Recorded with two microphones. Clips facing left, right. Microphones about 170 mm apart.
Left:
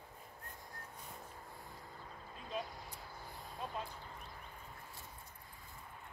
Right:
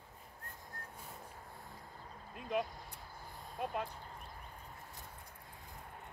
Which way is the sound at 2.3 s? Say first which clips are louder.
Right 6 dB; 60° right (ahead or behind).